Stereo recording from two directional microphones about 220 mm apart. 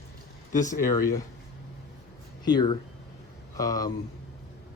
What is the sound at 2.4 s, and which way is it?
Speech, 20° left (ahead or behind).